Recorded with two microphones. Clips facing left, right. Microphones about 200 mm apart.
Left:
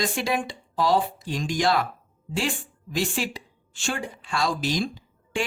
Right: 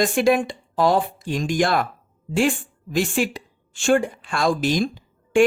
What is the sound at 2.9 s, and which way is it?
A woman's voice, 50° right (ahead or behind).